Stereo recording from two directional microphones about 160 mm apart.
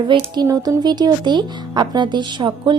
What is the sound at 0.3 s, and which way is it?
Speech, 25° right (ahead or behind).